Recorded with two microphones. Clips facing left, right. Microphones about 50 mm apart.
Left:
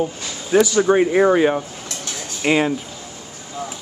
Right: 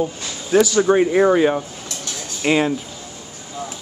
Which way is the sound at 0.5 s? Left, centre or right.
Centre.